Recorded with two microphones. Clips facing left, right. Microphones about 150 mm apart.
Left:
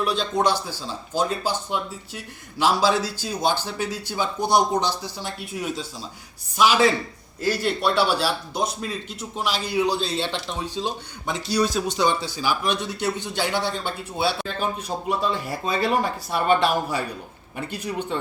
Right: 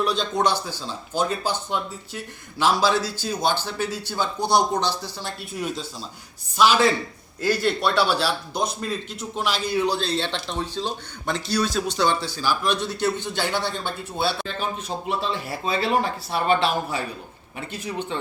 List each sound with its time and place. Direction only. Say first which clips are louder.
0.0 s a man's voice: even; 5° left (ahead or behind)
15.2 s a man's voice: left 2 dB; 45° left (ahead or behind)
17.7 s a man's voice: left 1 dB; 40° left (ahead or behind)